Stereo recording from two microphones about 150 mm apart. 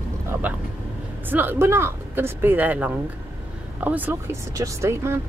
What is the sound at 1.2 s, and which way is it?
Speech, 15° right (ahead or behind).